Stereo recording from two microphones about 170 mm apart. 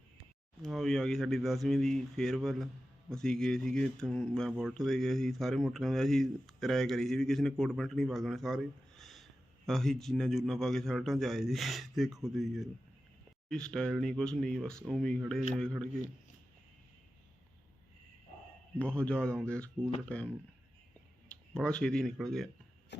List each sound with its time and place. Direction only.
0.6 s speech: centre (ahead or behind)
18.8 s speech: 5° left (ahead or behind)
21.2 s speech: 5° left (ahead or behind)
22.9 s a sound: 90° left